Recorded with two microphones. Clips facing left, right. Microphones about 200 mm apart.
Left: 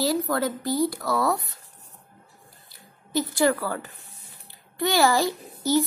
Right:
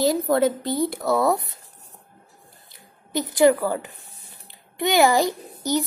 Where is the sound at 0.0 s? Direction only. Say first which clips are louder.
Right 5 dB; 20° right (ahead or behind).